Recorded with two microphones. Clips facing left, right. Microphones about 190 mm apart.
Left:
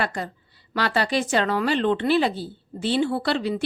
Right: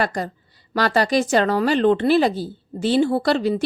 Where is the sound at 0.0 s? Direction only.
40° right (ahead or behind).